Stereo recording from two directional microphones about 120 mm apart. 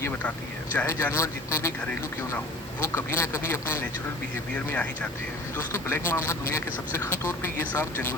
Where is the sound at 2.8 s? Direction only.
20° left (ahead or behind).